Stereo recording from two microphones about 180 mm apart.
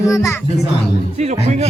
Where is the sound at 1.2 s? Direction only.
40° right (ahead or behind).